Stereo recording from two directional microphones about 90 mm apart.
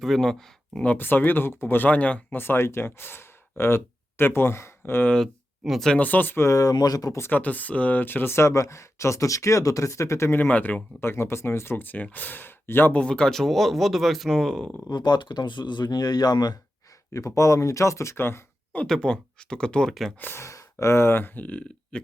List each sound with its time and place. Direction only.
0.0 s speech: 5° left (ahead or behind)
2.4 s speech: 25° left (ahead or behind)
5.1 s speech: centre (ahead or behind)
5.9 s speech: 15° left (ahead or behind); by 7.2 s 45° left (ahead or behind)
7.2 s speech: 20° left (ahead or behind)
13.0 s speech: 10° left (ahead or behind)
14.8 s speech: 55° left (ahead or behind)
17.1 s speech: 35° left (ahead or behind)
18.8 s speech: 10° left (ahead or behind)
20.1 s speech: 20° left (ahead or behind)
20.4 s speech: 35° left (ahead or behind); by 22.0 s 15° left (ahead or behind)